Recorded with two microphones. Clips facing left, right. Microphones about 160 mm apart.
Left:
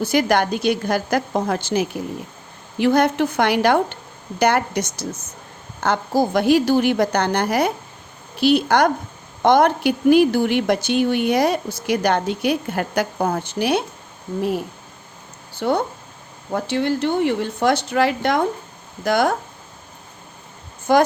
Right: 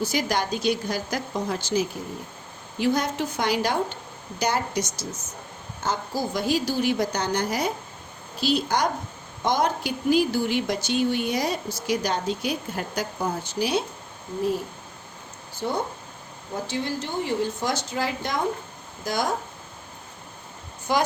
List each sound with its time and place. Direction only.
0.0 s a woman's voice: 60° left (ahead or behind)
15.5 s a woman's voice: 70° left (ahead or behind)
20.9 s a woman's voice: 50° left (ahead or behind)